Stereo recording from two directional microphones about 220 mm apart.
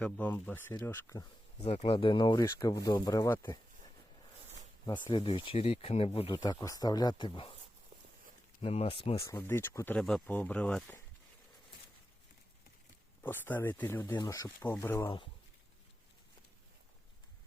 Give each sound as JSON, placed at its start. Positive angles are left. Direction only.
{"t": 0.0, "sound": "speech", "side_deg": 5}
{"t": 1.6, "sound": "speech", "side_deg": 30}
{"t": 4.9, "sound": "speech", "side_deg": 20}
{"t": 8.6, "sound": "speech", "side_deg": 25}
{"t": 9.2, "sound": "speech", "side_deg": 10}
{"t": 13.2, "sound": "speech", "side_deg": 10}